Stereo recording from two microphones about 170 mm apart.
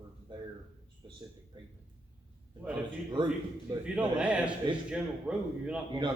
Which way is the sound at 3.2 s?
30° right (ahead or behind).